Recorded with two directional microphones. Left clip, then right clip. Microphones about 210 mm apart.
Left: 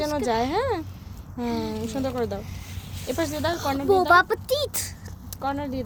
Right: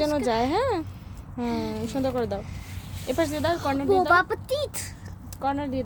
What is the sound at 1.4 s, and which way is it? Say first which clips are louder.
Speech: left 1 dB; 15° left (ahead or behind).